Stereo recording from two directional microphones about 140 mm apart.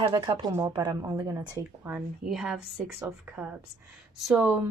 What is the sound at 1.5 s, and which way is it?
A woman's voice, 10° right (ahead or behind).